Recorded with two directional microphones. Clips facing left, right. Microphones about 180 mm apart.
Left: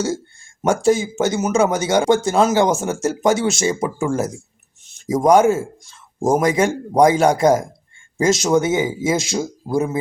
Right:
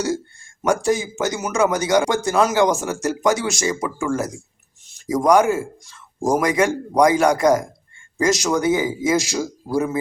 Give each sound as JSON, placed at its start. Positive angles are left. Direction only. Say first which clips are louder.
{"t": 0.6, "sound": "speech", "louder": "left 3 dB", "side_deg": 25}